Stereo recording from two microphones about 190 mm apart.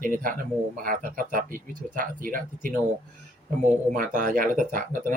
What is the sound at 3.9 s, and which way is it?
Speech, 45° right (ahead or behind).